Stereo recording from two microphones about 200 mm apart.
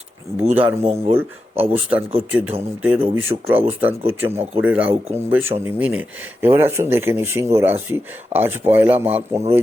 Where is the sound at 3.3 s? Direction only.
30° right (ahead or behind).